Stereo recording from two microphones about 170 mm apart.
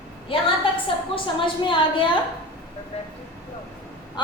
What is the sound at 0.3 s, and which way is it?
A woman's voice, 35° left (ahead or behind).